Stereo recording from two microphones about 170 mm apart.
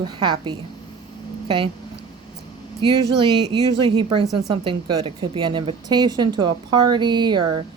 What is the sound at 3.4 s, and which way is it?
A woman's voice, 25° right (ahead or behind).